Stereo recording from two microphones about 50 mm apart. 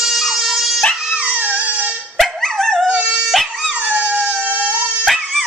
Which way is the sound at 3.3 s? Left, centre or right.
Centre.